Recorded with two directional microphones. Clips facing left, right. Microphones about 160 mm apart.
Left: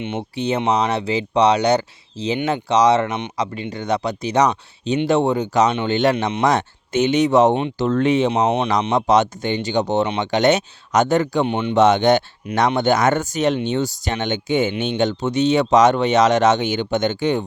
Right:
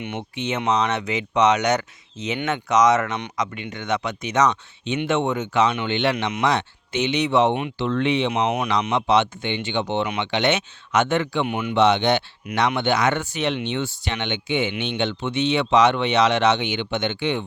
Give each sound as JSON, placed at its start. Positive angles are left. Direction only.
{"t": 0.0, "sound": "speech", "side_deg": 30}
{"t": 6.4, "sound": "speech", "side_deg": 45}
{"t": 8.3, "sound": "speech", "side_deg": 30}